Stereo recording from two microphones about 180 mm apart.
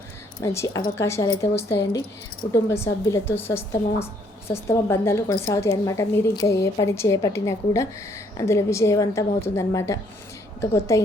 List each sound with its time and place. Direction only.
0.4 s a woman's voice: 15° left (ahead or behind)
2.5 s a woman's voice: 15° left (ahead or behind)